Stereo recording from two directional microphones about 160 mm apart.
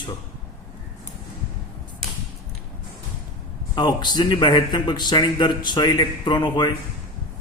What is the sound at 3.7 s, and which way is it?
A man's voice, 25° left (ahead or behind).